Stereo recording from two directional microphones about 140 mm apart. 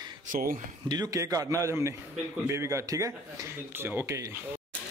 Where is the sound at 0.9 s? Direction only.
25° right (ahead or behind).